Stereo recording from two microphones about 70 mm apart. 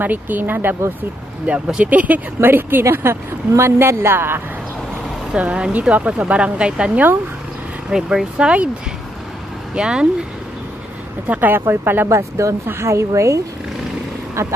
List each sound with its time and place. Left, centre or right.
0.0 s speech: right
5.3 s a woman's voice: centre
9.8 s a woman's voice: centre
11.2 s speech: right
12.1 s speech: right